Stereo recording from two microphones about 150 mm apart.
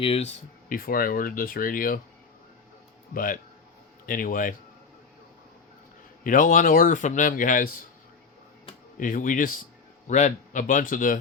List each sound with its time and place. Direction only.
0.0 s speech: 45° left (ahead or behind)
0.7 s speech: 75° left (ahead or behind)
3.2 s speech: 65° left (ahead or behind)
6.2 s speech: 60° left (ahead or behind)
9.0 s speech: 65° left (ahead or behind)
10.1 s speech: 55° left (ahead or behind)